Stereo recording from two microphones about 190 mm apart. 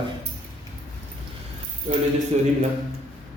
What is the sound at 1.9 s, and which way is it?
Speech, 40° right (ahead or behind).